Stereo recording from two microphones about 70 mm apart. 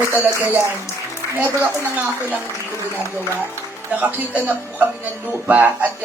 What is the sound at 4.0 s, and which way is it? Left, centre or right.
A man's voice, right.